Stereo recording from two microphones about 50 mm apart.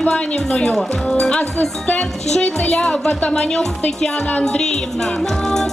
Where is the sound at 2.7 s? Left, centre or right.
Centre.